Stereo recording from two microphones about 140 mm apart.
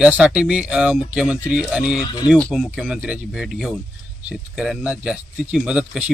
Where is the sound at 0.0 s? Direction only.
10° right (ahead or behind).